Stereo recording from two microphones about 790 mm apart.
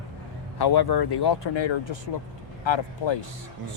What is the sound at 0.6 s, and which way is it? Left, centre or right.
Speech, left.